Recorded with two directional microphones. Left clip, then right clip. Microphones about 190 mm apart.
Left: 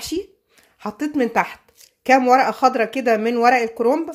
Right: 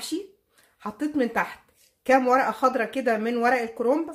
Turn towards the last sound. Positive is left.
turn(degrees=35)  # may be behind; listen again after turning